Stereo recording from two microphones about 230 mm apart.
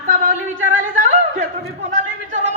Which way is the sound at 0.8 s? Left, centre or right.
Right.